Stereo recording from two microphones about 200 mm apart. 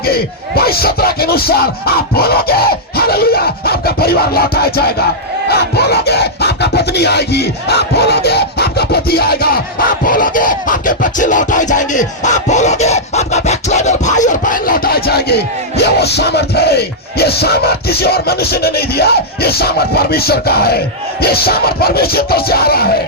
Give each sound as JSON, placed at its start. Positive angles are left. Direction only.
{"t": 0.0, "sound": "music", "side_deg": 50}